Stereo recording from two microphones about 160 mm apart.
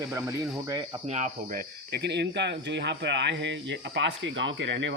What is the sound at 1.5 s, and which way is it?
Speech, 85° right.